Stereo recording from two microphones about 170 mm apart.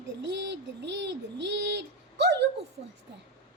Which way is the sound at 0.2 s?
90° right.